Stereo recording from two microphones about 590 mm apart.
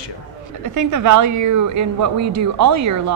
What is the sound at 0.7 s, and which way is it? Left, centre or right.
A woman's voice, right.